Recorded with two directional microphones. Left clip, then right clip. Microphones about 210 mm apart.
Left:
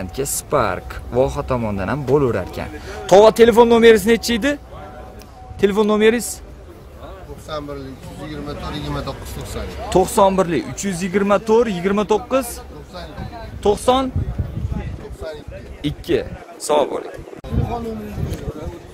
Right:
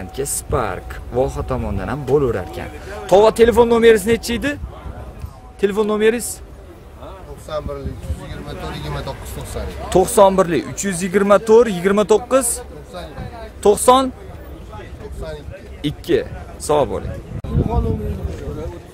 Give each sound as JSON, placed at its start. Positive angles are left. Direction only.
{"t": 0.0, "sound": "speech", "side_deg": 15}
{"t": 5.6, "sound": "speech", "side_deg": 15}
{"t": 7.5, "sound": "speech", "side_deg": -20}
{"t": 9.8, "sound": "speech", "side_deg": -10}
{"t": 15.8, "sound": "speech", "side_deg": -10}